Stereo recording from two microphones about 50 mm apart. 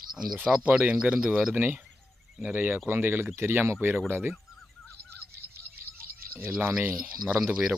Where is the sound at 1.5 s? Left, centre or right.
Right.